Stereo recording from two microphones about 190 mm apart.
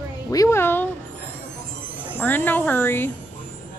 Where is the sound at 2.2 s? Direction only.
10° left (ahead or behind).